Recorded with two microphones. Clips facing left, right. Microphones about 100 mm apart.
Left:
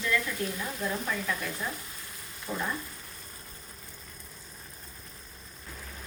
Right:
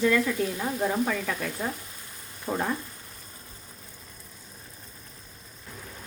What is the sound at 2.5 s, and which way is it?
Speech, 35° right (ahead or behind).